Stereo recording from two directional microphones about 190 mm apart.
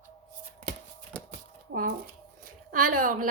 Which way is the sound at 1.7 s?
65° right (ahead or behind).